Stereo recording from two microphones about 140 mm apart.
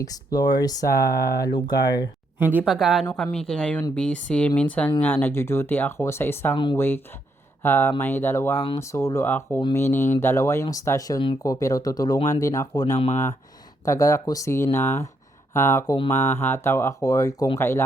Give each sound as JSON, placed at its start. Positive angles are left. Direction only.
{"t": 0.0, "sound": "speech", "side_deg": 25}
{"t": 2.4, "sound": "speech", "side_deg": -10}
{"t": 2.7, "sound": "a woman's voice", "side_deg": 0}
{"t": 13.8, "sound": "speech", "side_deg": 25}